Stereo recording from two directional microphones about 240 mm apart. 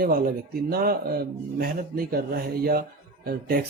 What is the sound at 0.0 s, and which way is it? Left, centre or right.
A man's voice, right.